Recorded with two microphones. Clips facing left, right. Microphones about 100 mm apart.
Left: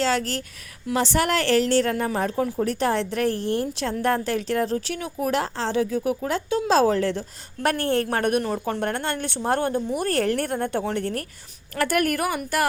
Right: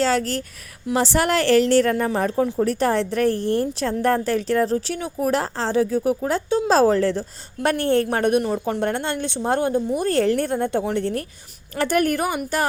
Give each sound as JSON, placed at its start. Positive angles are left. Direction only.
{"t": 0.0, "sound": "a woman's voice", "side_deg": -40}